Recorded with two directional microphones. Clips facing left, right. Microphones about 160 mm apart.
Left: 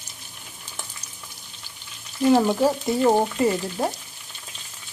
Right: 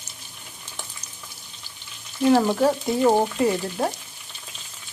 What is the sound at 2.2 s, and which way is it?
Speech, centre (ahead or behind).